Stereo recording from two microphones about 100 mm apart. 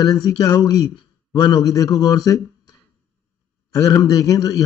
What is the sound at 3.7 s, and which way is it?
Speech, 35° left (ahead or behind).